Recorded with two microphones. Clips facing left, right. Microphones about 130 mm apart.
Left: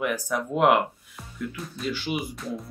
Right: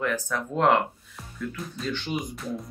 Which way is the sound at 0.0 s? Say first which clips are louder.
Left 1 dB; 10° left (ahead or behind).